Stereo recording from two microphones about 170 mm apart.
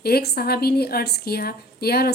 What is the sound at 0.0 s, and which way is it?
A woman's voice, 65° left (ahead or behind).